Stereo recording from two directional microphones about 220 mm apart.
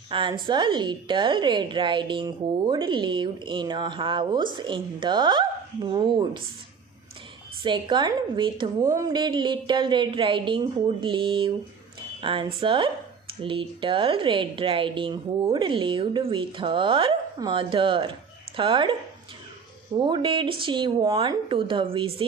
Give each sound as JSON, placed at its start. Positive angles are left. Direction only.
{"t": 0.1, "sound": "a woman's voice", "side_deg": -20}
{"t": 7.6, "sound": "a woman's voice", "side_deg": -20}
{"t": 20.0, "sound": "a woman's voice", "side_deg": -20}